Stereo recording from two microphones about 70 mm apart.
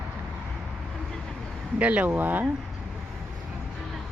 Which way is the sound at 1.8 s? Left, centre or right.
Centre.